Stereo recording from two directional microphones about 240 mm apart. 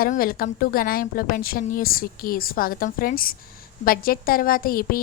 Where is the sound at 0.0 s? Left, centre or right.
Left.